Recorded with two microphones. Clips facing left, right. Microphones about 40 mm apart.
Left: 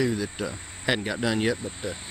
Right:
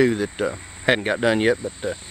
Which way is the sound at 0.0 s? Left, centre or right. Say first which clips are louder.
Right 7 dB; right.